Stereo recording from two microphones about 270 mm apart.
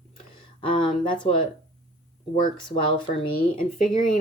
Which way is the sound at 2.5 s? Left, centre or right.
Centre.